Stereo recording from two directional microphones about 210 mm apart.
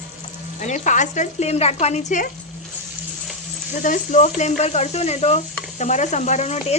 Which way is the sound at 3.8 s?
35° left (ahead or behind).